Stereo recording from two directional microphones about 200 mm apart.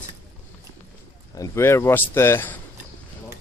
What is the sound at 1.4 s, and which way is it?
Speech, 15° left (ahead or behind).